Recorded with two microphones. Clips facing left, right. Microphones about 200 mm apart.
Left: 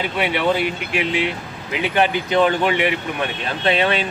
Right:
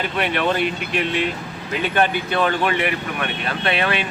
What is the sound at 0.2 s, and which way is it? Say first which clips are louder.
Speech: left 1 dB; 10° left (ahead or behind).